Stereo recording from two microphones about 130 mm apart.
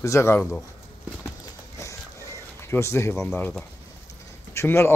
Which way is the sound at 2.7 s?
20° left (ahead or behind).